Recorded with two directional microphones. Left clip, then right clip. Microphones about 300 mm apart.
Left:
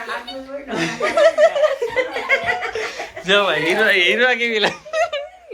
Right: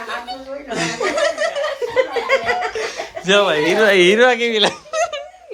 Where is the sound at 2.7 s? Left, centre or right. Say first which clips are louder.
Right 1 dB; centre.